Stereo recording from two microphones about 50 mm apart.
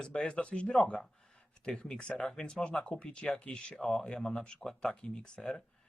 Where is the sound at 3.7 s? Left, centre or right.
Centre.